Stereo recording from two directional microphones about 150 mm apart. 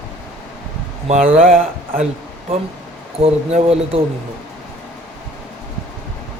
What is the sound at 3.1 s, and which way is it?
Speech, 45° right (ahead or behind).